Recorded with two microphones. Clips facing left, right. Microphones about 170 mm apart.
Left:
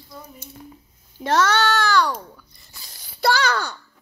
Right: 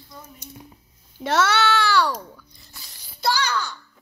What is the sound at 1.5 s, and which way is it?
Speech, 40° left (ahead or behind).